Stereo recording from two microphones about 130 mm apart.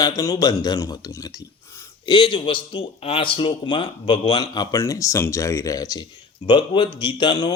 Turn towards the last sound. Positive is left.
turn(degrees=35)  # may be behind; listen again after turning